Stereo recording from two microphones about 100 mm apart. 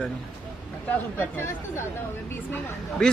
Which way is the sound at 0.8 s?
20° left (ahead or behind).